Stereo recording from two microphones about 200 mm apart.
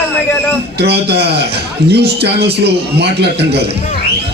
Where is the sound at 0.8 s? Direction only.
55° right (ahead or behind).